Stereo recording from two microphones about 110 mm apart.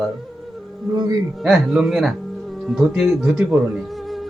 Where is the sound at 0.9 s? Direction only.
40° right (ahead or behind).